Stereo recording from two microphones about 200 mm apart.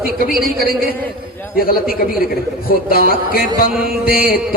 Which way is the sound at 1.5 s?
50° left (ahead or behind).